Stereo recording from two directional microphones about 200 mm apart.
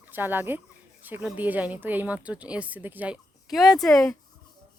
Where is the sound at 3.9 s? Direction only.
15° left (ahead or behind).